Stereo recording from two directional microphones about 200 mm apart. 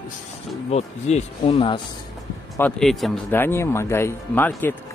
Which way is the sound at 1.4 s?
25° left (ahead or behind).